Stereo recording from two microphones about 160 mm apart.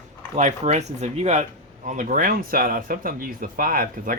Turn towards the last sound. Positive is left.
turn(degrees=-65)  # may be behind; listen again after turning